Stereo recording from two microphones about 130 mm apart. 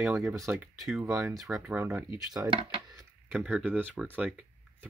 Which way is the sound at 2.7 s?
30° right (ahead or behind).